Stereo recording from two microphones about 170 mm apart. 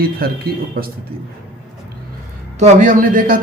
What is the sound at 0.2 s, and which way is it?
Speech, 60° right (ahead or behind).